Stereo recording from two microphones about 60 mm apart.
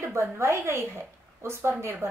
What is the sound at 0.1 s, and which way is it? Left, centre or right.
A woman's voice, right.